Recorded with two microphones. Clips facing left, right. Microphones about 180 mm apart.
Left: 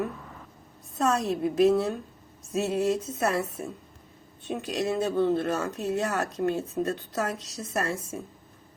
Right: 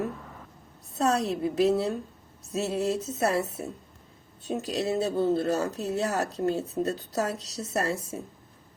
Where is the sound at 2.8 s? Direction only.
35° right (ahead or behind).